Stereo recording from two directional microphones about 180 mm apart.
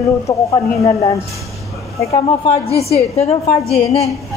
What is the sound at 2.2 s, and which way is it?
A woman's voice, 30° left (ahead or behind).